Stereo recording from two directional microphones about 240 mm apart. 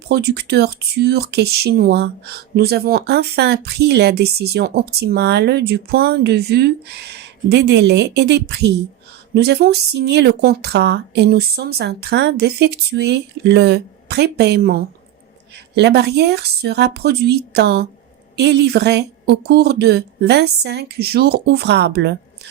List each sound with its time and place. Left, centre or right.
0.1 s speech: right